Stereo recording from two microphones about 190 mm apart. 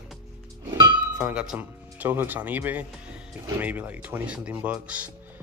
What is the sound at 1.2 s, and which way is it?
Speech, 5° right (ahead or behind).